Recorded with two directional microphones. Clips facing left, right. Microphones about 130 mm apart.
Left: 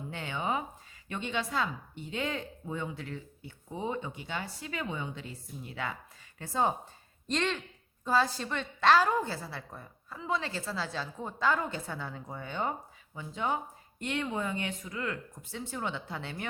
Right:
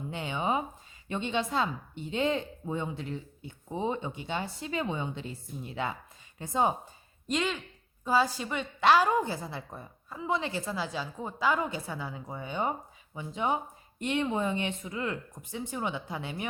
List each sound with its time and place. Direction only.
0.1 s a woman's voice: 20° right (ahead or behind)
7.3 s a woman's voice: 5° right (ahead or behind)